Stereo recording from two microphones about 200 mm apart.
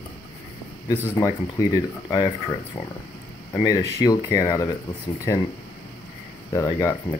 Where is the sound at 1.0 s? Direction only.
15° left (ahead or behind).